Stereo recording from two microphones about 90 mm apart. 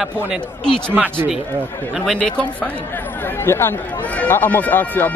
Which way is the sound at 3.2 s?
25° left (ahead or behind).